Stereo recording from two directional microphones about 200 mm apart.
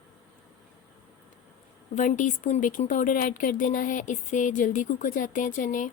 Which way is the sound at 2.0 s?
40° left (ahead or behind).